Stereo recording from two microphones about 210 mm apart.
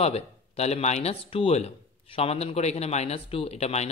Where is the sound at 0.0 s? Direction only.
30° left (ahead or behind).